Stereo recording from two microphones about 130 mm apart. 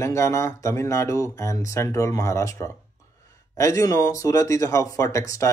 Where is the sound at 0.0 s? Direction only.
25° left (ahead or behind).